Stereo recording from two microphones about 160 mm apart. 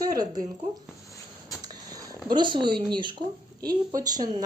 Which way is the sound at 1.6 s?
25° right (ahead or behind).